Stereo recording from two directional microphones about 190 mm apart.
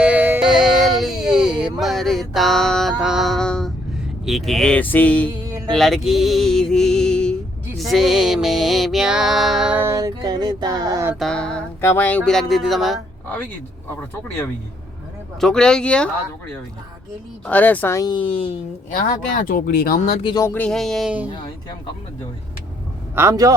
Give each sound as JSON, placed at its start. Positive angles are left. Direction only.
{"t": 0.0, "sound": "a sound", "side_deg": -10}
{"t": 4.3, "sound": "speech", "side_deg": 0}
{"t": 5.5, "sound": "music", "side_deg": -15}
{"t": 5.7, "sound": "music", "side_deg": 0}
{"t": 11.2, "sound": "speech", "side_deg": 5}
{"t": 15.4, "sound": "music", "side_deg": 5}
{"t": 17.4, "sound": "speech", "side_deg": 10}
{"t": 18.9, "sound": "speech", "side_deg": 45}
{"t": 20.2, "sound": "a sound", "side_deg": 20}
{"t": 20.5, "sound": "music", "side_deg": 5}
{"t": 23.1, "sound": "a man's voice", "side_deg": -15}